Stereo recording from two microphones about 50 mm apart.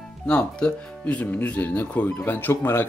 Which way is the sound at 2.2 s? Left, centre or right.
Left.